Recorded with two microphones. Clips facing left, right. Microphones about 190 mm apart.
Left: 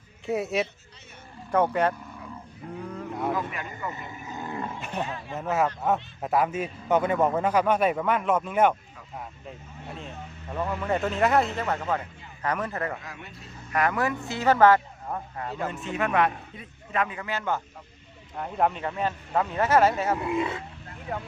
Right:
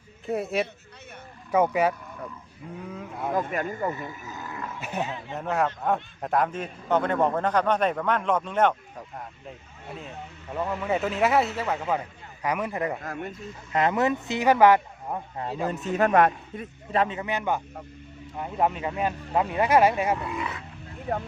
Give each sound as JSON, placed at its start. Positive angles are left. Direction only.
{"t": 0.3, "sound": "a man's voice", "side_deg": 0}
{"t": 3.3, "sound": "speech", "side_deg": -45}
{"t": 4.3, "sound": "roaring cats", "side_deg": 25}
{"t": 4.8, "sound": "a man's voice", "side_deg": -5}
{"t": 13.0, "sound": "speech", "side_deg": -50}
{"t": 13.7, "sound": "speech", "side_deg": -20}
{"t": 15.6, "sound": "a man's voice", "side_deg": -40}
{"t": 16.9, "sound": "speech", "side_deg": -30}
{"t": 18.3, "sound": "a man's voice", "side_deg": -5}
{"t": 20.1, "sound": "speech", "side_deg": 25}